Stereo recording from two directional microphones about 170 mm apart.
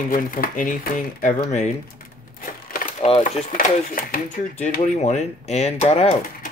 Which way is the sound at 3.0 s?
40° left (ahead or behind).